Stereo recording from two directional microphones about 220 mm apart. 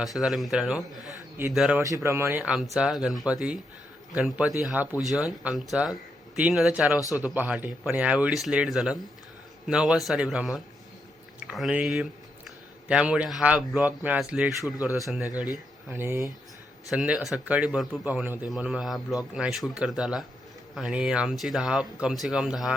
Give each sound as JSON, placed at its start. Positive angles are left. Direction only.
{"t": 0.0, "sound": "a man's voice", "side_deg": 0}